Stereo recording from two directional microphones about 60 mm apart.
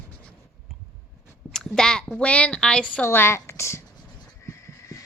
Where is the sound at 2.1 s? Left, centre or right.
Left.